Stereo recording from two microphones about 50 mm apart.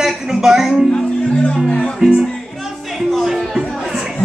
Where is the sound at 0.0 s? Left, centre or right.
Centre.